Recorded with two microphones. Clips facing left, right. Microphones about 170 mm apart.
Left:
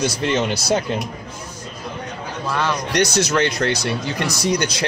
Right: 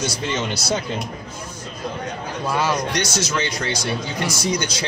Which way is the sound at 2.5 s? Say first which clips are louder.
Right 1 dB; 10° right (ahead or behind).